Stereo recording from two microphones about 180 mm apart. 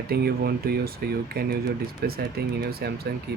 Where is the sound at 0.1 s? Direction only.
60° right (ahead or behind).